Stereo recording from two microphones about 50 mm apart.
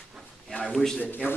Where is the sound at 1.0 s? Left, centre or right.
Left.